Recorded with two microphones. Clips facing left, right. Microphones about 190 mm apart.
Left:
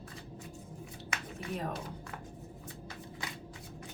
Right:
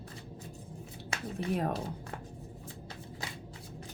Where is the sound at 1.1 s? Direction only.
30° right (ahead or behind).